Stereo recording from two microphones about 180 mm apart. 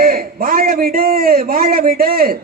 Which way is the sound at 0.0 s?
55° right (ahead or behind).